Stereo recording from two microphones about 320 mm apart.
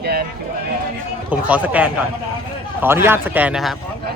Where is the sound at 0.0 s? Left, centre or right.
Right.